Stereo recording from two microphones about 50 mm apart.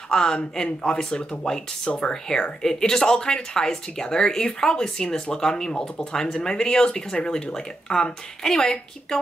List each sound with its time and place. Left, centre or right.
0.1 s speech: centre